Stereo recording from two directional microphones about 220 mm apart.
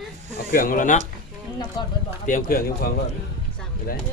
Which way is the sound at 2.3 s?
40° left (ahead or behind).